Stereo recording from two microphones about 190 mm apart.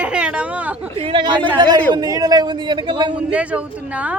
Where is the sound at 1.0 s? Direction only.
30° right (ahead or behind).